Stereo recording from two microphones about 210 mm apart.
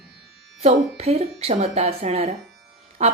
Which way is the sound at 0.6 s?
30° right (ahead or behind).